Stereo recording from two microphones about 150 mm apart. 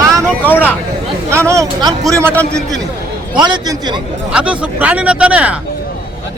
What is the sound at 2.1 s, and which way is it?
Speech, 20° right (ahead or behind).